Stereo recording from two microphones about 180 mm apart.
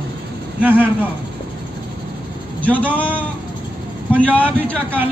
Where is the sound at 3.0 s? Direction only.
10° left (ahead or behind).